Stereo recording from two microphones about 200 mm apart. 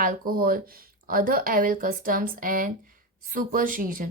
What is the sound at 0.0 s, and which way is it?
Speech, 45° right (ahead or behind).